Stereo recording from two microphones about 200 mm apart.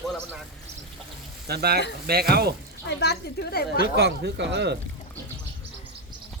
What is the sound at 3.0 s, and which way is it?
Speech, 55° left (ahead or behind).